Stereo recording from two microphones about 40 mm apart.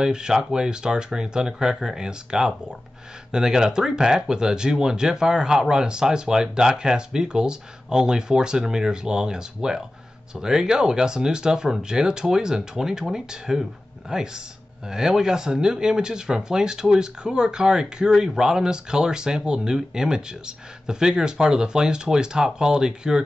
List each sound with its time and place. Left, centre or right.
0.0 s speech: centre